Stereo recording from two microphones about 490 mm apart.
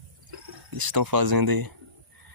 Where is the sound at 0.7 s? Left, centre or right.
Right.